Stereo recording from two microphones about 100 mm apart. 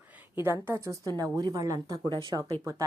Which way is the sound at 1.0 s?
40° right (ahead or behind).